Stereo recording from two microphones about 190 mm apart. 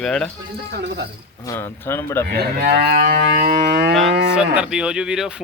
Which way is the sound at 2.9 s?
50° right (ahead or behind).